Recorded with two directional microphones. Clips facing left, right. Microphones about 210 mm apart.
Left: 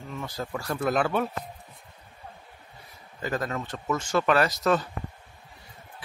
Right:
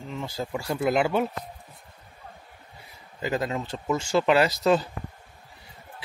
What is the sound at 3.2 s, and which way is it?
Speech, 20° right (ahead or behind).